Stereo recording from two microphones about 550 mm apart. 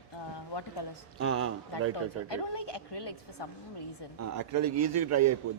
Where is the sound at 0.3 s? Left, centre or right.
Left.